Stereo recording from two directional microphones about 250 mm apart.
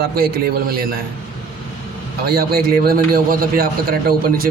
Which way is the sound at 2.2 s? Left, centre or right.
Right.